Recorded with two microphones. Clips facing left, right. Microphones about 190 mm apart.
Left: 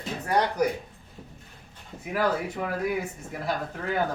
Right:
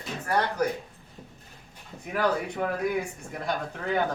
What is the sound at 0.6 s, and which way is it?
Speech, 10° left (ahead or behind).